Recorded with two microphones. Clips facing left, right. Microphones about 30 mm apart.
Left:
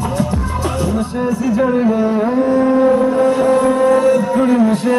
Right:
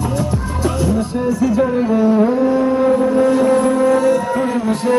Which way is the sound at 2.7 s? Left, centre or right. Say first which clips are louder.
Left 1 dB; left.